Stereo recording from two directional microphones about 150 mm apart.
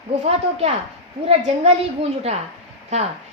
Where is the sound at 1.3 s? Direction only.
45° right (ahead or behind).